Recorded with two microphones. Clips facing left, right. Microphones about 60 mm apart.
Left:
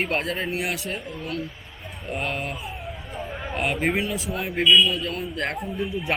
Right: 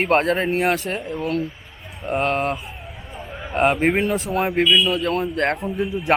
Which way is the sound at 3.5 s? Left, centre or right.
Right.